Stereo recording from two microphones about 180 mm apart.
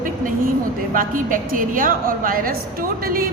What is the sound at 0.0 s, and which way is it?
Vehicle, 50° right (ahead or behind).